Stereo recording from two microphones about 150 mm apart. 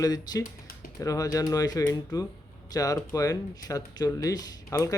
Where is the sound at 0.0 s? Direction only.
25° left (ahead or behind).